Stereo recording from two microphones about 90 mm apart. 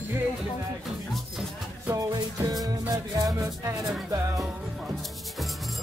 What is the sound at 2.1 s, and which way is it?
Music, 45° right (ahead or behind).